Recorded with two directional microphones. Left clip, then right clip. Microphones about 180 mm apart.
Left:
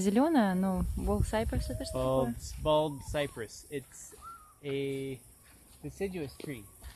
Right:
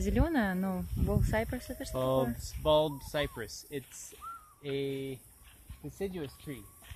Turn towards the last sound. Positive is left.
turn(degrees=-5)  # may be behind; listen again after turning